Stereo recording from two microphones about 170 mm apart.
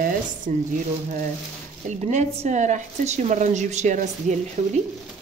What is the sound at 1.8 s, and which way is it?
Speech, 45° right (ahead or behind).